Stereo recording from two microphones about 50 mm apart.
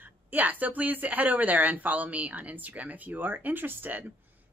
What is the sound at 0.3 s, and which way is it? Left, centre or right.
Speech, right.